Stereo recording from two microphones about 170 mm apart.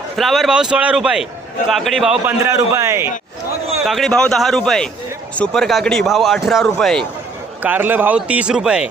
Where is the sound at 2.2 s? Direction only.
15° right (ahead or behind).